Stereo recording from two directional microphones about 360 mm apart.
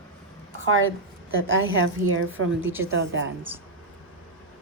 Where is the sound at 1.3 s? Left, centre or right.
Right.